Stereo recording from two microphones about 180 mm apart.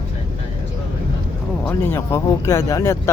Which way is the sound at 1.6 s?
15° left (ahead or behind).